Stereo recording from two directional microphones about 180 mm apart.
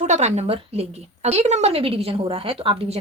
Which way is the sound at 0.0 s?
40° right (ahead or behind).